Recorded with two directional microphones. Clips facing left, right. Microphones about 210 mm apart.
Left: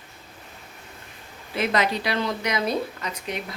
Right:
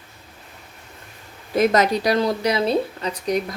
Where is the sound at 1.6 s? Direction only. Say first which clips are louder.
Right 6 dB; 40° right (ahead or behind).